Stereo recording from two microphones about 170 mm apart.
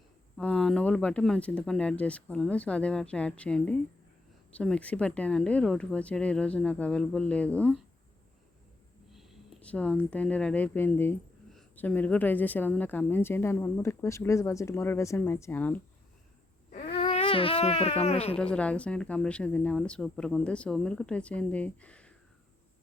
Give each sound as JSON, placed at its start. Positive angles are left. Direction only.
{"t": 0.3, "sound": "a woman's voice", "side_deg": 5}
{"t": 9.1, "sound": "a woman's voice", "side_deg": 0}
{"t": 17.0, "sound": "speech", "side_deg": 40}
{"t": 18.5, "sound": "a woman's voice", "side_deg": 5}